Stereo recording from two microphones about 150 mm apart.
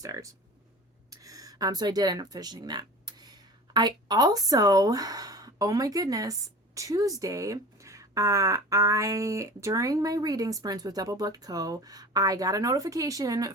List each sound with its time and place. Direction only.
0.0 s speech: 20° right (ahead or behind)